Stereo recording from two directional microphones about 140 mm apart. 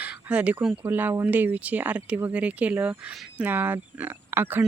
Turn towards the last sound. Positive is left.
turn(degrees=-15)  # may be behind; listen again after turning